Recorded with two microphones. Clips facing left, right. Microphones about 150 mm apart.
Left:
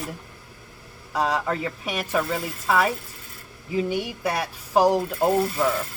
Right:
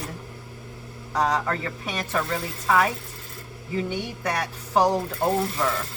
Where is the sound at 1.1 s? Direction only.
10° left (ahead or behind).